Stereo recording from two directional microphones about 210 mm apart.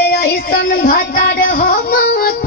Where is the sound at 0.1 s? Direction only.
45° left (ahead or behind).